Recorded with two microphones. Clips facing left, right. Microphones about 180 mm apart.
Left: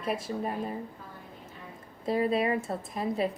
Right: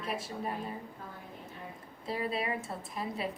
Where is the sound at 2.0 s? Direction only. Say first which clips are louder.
Left 8 dB; 40° left (ahead or behind).